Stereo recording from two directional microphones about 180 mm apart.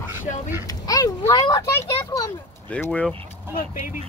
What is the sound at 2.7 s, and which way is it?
Speech, 5° left (ahead or behind).